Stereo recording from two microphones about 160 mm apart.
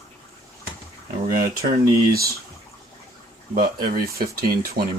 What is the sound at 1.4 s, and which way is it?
Speech, 65° right (ahead or behind).